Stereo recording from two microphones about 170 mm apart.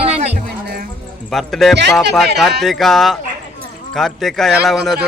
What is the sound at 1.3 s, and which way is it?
Speech, centre (ahead or behind).